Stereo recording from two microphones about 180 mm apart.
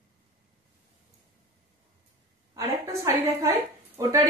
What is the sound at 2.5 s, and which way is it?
A woman's voice, 15° right (ahead or behind).